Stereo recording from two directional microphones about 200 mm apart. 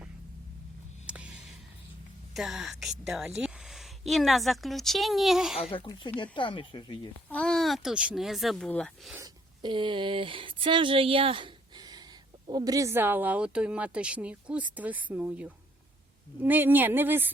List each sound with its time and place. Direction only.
1.0 s a sound: 5° right (ahead or behind)
2.3 s a woman's voice: centre (ahead or behind)
5.7 s speech: 25° left (ahead or behind)
7.3 s speech: 5° left (ahead or behind)
9.1 s speech: 20° right (ahead or behind)